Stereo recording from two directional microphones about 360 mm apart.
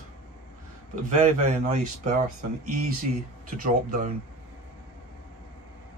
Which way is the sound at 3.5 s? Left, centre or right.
Right.